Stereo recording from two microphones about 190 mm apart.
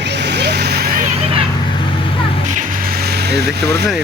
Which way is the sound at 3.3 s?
60° right (ahead or behind).